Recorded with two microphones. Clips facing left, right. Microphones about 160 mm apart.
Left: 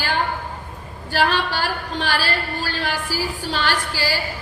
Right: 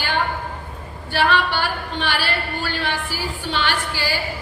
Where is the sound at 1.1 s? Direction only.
40° left (ahead or behind).